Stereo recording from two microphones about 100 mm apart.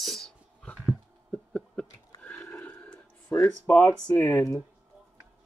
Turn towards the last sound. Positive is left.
turn(degrees=25)  # may be behind; listen again after turning